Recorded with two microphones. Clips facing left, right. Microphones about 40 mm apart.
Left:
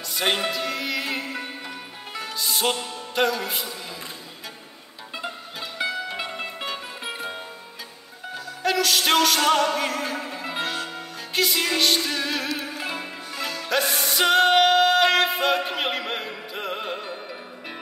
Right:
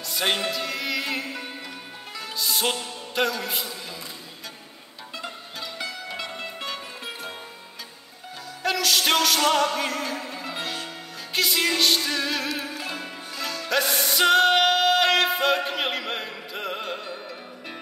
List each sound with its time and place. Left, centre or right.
0.1 s music: centre
5.1 s music: left
8.6 s music: centre
12.8 s music: centre